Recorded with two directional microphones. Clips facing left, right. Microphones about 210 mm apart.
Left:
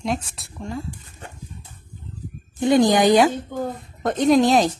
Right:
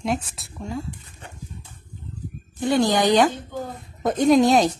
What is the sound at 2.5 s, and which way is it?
Speech, 15° left (ahead or behind).